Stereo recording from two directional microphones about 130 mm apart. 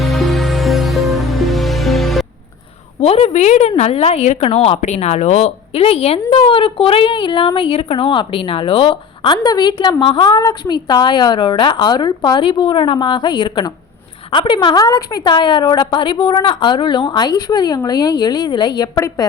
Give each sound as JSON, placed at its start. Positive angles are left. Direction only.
{"t": 0.0, "sound": "music", "side_deg": 0}
{"t": 3.0, "sound": "a woman's voice", "side_deg": 55}